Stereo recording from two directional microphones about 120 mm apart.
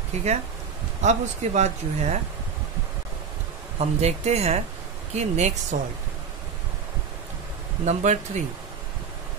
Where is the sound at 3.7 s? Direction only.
65° right (ahead or behind).